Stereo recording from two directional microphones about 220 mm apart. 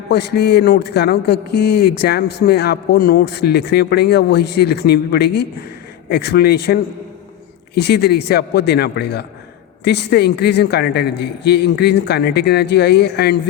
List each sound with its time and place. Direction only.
0.1 s speech: 50° left (ahead or behind)
7.8 s speech: 50° left (ahead or behind)